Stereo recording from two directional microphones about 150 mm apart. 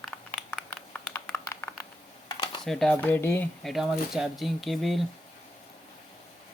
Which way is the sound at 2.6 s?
5° left (ahead or behind).